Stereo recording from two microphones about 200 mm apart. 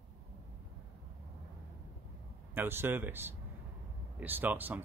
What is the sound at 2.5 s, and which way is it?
Speech, 10° right (ahead or behind).